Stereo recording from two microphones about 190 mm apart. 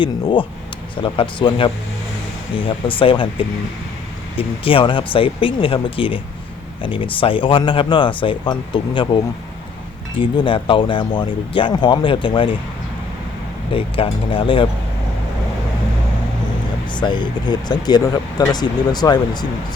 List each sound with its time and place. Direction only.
0.0 s speech: 25° left (ahead or behind)
10.2 s speech: 25° left (ahead or behind)
13.7 s speech: 30° left (ahead or behind)
16.9 s speech: 25° left (ahead or behind)